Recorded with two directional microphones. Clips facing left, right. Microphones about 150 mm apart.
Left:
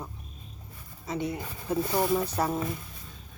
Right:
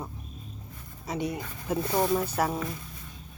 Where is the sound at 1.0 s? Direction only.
20° right (ahead or behind).